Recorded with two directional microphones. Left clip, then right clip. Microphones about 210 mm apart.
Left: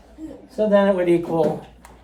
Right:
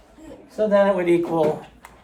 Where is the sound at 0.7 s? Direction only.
5° left (ahead or behind).